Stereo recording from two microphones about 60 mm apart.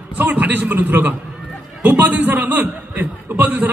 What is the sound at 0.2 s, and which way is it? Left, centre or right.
A man's voice, right.